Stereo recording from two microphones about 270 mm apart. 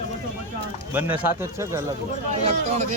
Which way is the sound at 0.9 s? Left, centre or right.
Centre.